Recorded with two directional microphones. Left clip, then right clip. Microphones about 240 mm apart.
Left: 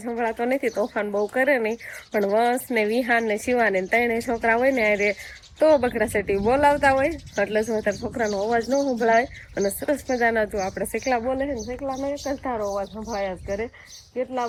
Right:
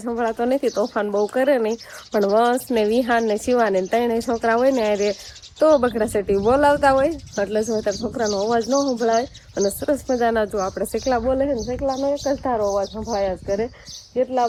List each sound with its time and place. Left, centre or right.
0.0 s speech: centre